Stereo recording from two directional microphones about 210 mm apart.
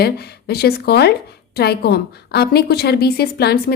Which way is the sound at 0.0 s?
50° left (ahead or behind).